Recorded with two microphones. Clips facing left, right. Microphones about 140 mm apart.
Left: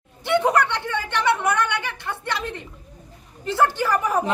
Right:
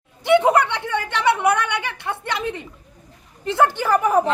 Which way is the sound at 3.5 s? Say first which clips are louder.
Right 2 dB; 20° right (ahead or behind).